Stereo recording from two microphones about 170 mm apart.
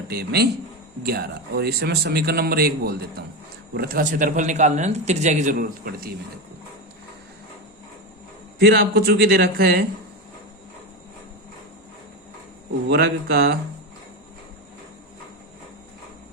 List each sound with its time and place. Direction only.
0.1 s a man's voice: 70° right (ahead or behind); by 5.5 s 45° right (ahead or behind)
5.5 s a man's voice: 60° right (ahead or behind)
8.5 s a man's voice: 70° right (ahead or behind)
12.9 s a man's voice: 70° right (ahead or behind)